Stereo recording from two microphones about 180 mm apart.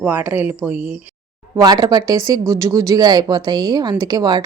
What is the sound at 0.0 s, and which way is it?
Speech, 10° right (ahead or behind).